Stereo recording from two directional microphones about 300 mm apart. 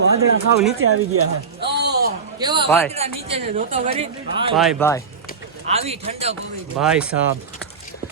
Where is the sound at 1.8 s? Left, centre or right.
Right.